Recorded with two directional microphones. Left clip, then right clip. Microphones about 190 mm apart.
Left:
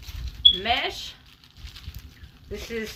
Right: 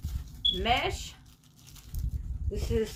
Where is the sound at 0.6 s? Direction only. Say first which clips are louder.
Left 3 dB; 10° left (ahead or behind).